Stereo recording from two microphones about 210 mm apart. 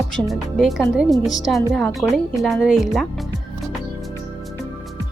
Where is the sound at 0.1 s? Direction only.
Centre (ahead or behind).